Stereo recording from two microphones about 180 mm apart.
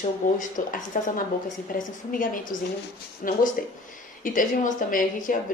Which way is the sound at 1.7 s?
50° left (ahead or behind).